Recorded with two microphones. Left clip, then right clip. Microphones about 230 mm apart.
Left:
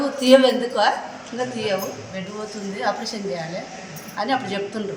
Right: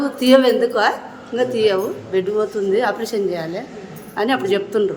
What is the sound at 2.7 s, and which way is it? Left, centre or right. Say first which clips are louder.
A woman's voice: right 3 dB; right.